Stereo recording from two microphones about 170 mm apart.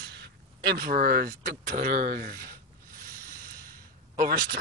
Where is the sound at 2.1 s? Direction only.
55° right (ahead or behind).